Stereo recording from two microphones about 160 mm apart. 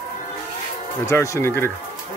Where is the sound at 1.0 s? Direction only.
20° left (ahead or behind).